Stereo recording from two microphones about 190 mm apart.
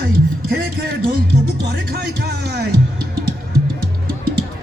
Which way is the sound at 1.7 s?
60° right (ahead or behind).